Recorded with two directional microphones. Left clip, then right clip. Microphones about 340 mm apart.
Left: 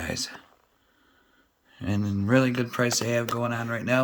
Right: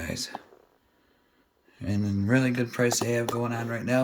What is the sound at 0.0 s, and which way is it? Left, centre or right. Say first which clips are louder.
Speech: left 3 dB; centre.